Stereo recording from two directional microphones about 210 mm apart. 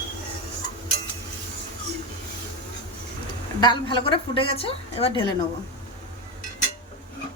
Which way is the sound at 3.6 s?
20° left (ahead or behind).